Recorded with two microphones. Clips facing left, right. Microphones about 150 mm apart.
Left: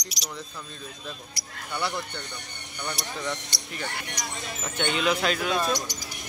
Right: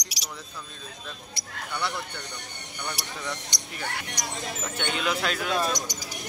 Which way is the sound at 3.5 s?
15° right (ahead or behind).